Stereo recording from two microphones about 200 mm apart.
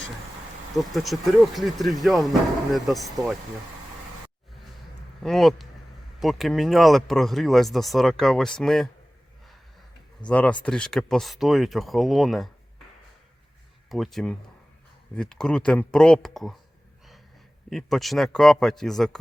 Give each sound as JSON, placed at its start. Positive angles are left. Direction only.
{"t": 0.8, "sound": "speech", "side_deg": 0}
{"t": 5.2, "sound": "speech", "side_deg": 0}
{"t": 10.2, "sound": "speech", "side_deg": 5}
{"t": 13.9, "sound": "speech", "side_deg": 0}
{"t": 17.7, "sound": "speech", "side_deg": 0}